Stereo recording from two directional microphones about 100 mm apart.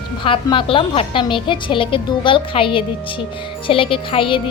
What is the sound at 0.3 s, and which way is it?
A woman's voice, 60° left (ahead or behind).